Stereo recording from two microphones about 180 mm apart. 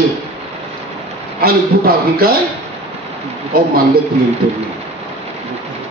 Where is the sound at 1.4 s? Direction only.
55° right (ahead or behind).